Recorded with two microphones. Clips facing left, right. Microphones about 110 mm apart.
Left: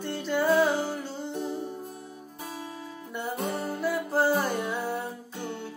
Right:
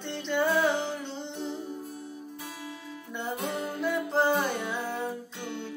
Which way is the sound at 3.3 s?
45° left (ahead or behind).